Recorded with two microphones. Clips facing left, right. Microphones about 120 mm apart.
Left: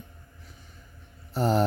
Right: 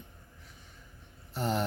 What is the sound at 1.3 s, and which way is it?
Speech, 40° left (ahead or behind).